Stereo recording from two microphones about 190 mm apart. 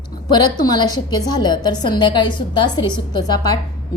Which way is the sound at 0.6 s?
20° left (ahead or behind).